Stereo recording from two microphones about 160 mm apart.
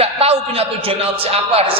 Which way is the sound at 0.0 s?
40° right (ahead or behind).